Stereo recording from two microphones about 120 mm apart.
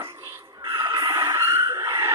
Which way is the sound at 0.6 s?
30° right (ahead or behind).